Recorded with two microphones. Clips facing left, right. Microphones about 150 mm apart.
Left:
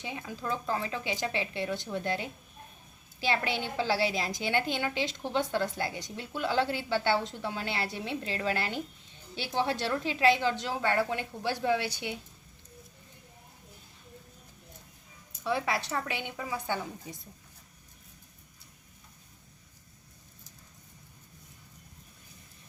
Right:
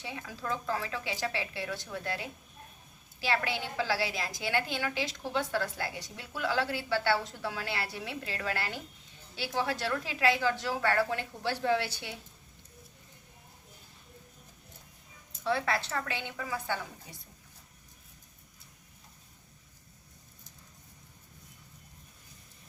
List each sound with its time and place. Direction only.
0.0 s a woman's voice: 20° left (ahead or behind)
15.4 s a woman's voice: 15° left (ahead or behind)